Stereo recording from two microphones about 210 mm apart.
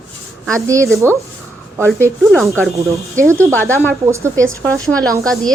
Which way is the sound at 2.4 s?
10° right (ahead or behind).